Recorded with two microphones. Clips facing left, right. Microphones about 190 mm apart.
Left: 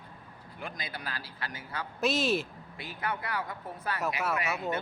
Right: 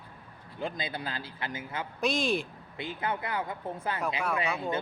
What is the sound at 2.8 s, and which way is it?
Speech, 25° right (ahead or behind).